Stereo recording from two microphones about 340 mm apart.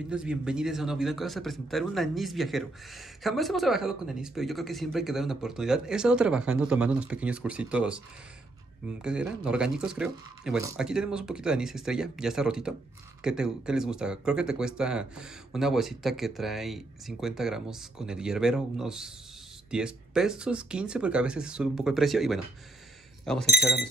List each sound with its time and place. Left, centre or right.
0.1 s a man's voice: centre